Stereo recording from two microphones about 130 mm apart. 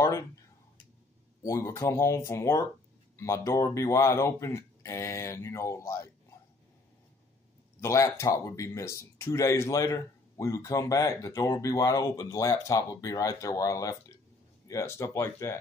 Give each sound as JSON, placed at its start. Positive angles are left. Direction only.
{"t": 1.4, "sound": "speech", "side_deg": 20}
{"t": 7.8, "sound": "speech", "side_deg": 20}